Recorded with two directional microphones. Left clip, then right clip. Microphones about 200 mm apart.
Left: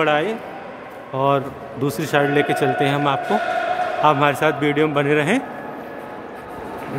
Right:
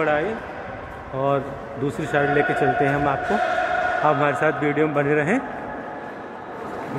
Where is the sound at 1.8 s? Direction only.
20° left (ahead or behind).